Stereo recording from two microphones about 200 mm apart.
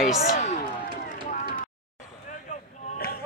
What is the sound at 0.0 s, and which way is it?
Speech, 40° left (ahead or behind).